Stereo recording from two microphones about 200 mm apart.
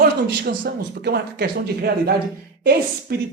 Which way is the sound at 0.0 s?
50° right (ahead or behind).